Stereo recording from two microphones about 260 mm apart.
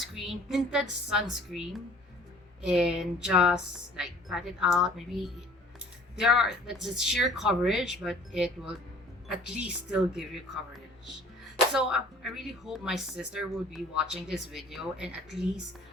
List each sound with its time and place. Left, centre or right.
0.0 s a woman's voice: centre
11.5 s a woman's voice: centre